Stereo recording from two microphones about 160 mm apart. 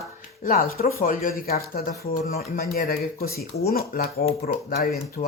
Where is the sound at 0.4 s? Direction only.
55° left (ahead or behind).